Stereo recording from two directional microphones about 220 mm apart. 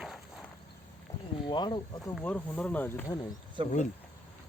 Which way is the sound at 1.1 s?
15° left (ahead or behind).